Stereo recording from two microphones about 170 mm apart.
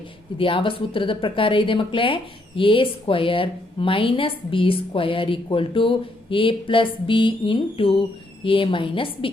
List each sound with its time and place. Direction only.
0.3 s speech: 30° left (ahead or behind)